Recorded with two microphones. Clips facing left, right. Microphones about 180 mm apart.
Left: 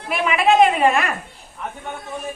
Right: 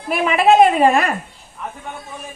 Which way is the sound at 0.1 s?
40° right (ahead or behind).